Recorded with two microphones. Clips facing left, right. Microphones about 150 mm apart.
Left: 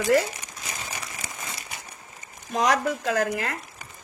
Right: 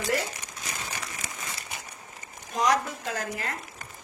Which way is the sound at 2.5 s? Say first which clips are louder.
Left 2 dB; 65° left (ahead or behind).